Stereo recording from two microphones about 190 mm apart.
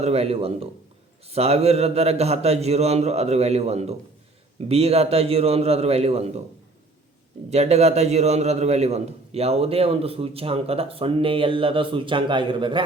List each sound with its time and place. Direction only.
0.0 s a man's voice: 35° right (ahead or behind)
7.5 s a man's voice: 35° right (ahead or behind)